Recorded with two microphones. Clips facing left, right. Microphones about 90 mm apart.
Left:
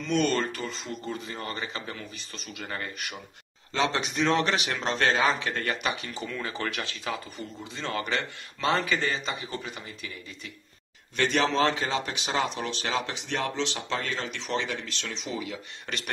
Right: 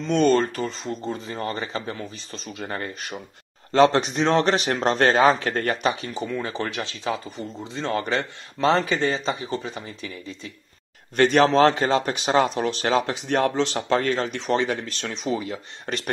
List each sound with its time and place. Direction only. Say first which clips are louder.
0.0 s speech: right 7 dB; 35° right (ahead or behind)
3.7 s speech: right 10 dB; 45° right (ahead or behind)
11.1 s speech: right 8 dB; 50° right (ahead or behind)